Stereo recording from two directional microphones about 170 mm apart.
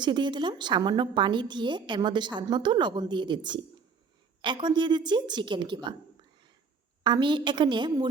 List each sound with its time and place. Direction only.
0.0 s a woman's voice: 25° right (ahead or behind)
7.0 s a woman's voice: 25° right (ahead or behind)